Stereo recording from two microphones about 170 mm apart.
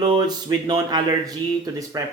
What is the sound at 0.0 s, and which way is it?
Speech, 25° right (ahead or behind).